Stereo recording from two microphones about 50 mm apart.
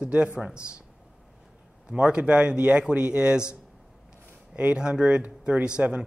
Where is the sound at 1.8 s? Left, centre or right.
Right.